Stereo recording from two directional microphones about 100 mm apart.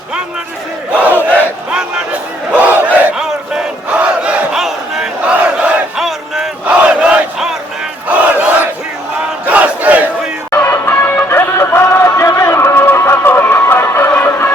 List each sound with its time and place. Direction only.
2.5 s battle cry: 15° right (ahead or behind)
8.0 s crowd: 15° right (ahead or behind)
9.5 s battle cry: 15° right (ahead or behind)
10.5 s music: 20° left (ahead or behind)